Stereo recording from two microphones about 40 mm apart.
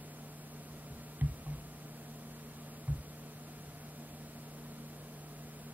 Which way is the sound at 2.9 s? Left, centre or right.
Right.